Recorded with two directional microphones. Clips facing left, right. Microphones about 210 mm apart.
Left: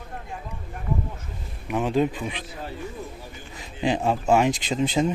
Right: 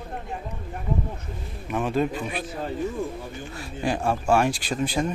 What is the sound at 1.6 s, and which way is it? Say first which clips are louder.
Speech: left 2 dB; 15° left (ahead or behind).